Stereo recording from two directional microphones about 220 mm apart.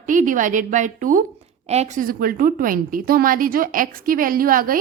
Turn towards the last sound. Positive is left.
turn(degrees=-40)  # may be behind; listen again after turning